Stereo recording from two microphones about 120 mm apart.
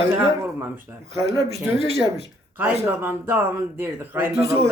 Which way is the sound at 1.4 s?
60° right (ahead or behind).